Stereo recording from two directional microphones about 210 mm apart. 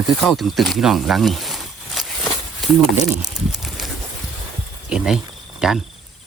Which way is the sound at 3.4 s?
Centre (ahead or behind).